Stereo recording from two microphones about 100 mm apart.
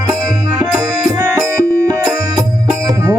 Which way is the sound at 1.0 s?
25° right (ahead or behind).